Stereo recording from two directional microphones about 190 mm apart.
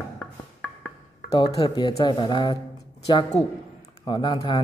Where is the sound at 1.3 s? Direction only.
20° left (ahead or behind).